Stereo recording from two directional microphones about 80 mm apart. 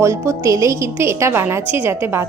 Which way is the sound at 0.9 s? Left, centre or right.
Right.